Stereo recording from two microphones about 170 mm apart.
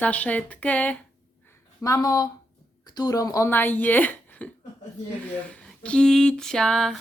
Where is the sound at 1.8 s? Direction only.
20° left (ahead or behind).